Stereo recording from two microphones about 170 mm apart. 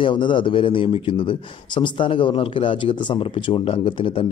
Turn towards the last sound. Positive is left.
turn(degrees=30)  # may be behind; listen again after turning